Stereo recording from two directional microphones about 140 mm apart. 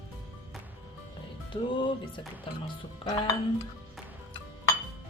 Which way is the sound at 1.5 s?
35° left (ahead or behind).